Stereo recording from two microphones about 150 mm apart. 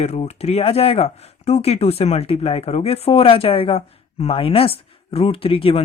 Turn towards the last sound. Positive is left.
turn(degrees=40)  # may be behind; listen again after turning